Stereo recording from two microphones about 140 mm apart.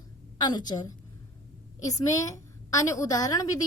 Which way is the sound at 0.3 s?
30° left (ahead or behind).